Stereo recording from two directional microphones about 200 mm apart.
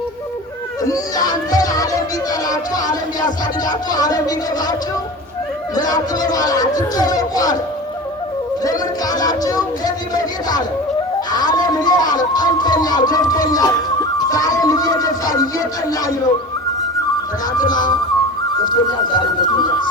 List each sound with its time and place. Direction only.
0.9 s a child's voice: 20° left (ahead or behind)
5.9 s speech: 20° left (ahead or behind)
9.1 s speech: 20° left (ahead or behind)
11.3 s speech: 20° left (ahead or behind)
17.6 s speech: 20° left (ahead or behind)